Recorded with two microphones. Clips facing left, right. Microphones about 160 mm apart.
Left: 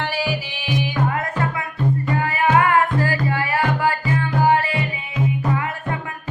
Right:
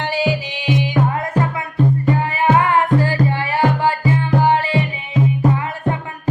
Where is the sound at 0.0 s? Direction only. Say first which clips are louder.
Right 4 dB; 20° right (ahead or behind).